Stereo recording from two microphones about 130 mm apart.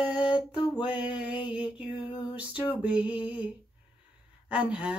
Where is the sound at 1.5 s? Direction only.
10° right (ahead or behind).